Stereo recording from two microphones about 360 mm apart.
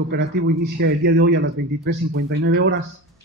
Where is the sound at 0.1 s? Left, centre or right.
Right.